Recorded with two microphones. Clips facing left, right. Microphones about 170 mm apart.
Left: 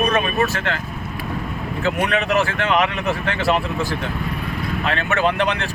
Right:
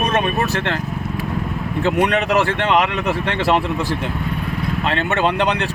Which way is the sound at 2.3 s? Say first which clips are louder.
Right 2 dB; 30° right (ahead or behind).